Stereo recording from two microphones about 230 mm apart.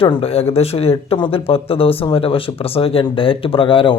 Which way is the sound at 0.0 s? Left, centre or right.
Left.